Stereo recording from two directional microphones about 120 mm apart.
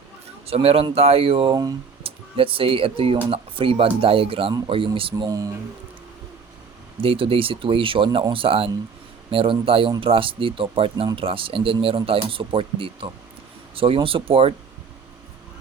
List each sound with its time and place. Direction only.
0.4 s speech: 55° right (ahead or behind)
5.1 s speech: 30° right (ahead or behind)
7.0 s speech: 50° right (ahead or behind)